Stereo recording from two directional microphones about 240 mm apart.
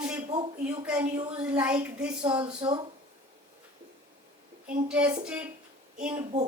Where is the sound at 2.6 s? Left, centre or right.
Centre.